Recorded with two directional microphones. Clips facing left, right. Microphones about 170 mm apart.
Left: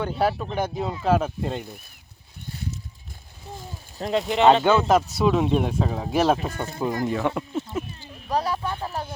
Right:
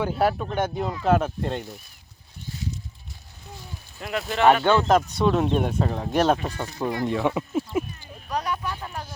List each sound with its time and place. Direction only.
0.0 s speech: centre (ahead or behind)
4.1 s speech: 20° left (ahead or behind)
4.7 s speech: 5° left (ahead or behind)
7.0 s a sound: centre (ahead or behind)
8.3 s speech: 30° left (ahead or behind)